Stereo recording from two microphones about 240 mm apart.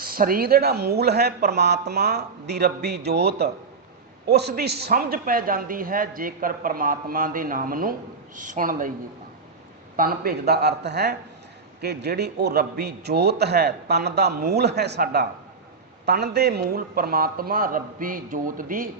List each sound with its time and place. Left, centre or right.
0.0 s a man's voice: right
10.0 s a man's voice: right